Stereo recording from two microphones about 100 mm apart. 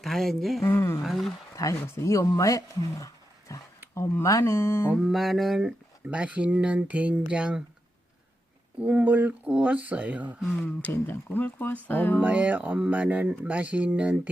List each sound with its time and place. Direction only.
0.0 s speech: 5° left (ahead or behind)
0.6 s speech: 25° left (ahead or behind)
1.0 s speech: centre (ahead or behind)
1.5 s speech: 30° left (ahead or behind)
4.9 s speech: 5° right (ahead or behind)
8.8 s speech: 15° right (ahead or behind)
10.7 s speech: 15° left (ahead or behind)
12.2 s speech: 15° right (ahead or behind)